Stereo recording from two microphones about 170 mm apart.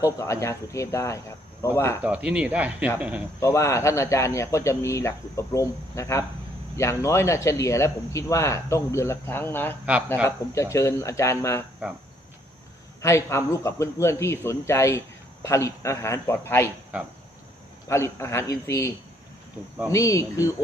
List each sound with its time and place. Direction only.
0.0 s speech: 15° left (ahead or behind)
2.0 s speech: 10° right (ahead or behind)
3.4 s speech: 15° left (ahead or behind)
13.0 s speech: 15° left (ahead or behind)
17.8 s speech: 15° left (ahead or behind)